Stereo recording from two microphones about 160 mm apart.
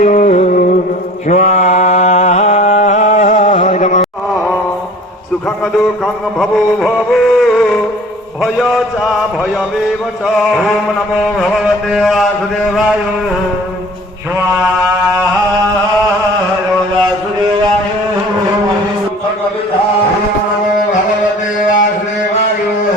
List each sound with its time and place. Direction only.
0.0 s music: 50° left (ahead or behind)
1.3 s a sound: 45° left (ahead or behind)
3.3 s music: 40° left (ahead or behind)
6.4 s music: centre (ahead or behind)
8.4 s a man's voice: centre (ahead or behind)
10.5 s a man's voice: 5° right (ahead or behind)